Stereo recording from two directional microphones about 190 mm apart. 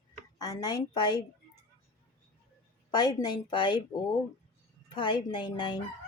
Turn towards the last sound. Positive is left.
turn(degrees=25)  # may be behind; listen again after turning